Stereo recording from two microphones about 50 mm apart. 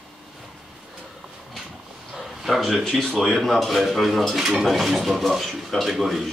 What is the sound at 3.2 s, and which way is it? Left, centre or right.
Speech, centre.